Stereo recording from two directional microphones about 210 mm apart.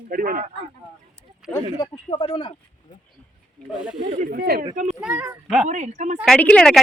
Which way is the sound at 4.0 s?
35° right (ahead or behind).